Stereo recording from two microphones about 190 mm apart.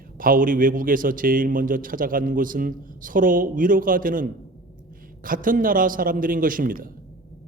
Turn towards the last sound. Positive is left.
turn(degrees=-45)  # may be behind; listen again after turning